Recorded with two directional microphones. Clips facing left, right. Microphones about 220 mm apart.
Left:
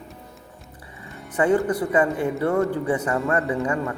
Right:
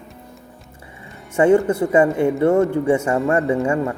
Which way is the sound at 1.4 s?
25° right (ahead or behind).